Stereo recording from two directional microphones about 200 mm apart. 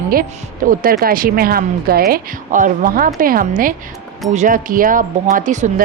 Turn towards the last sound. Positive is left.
turn(degrees=-40)  # may be behind; listen again after turning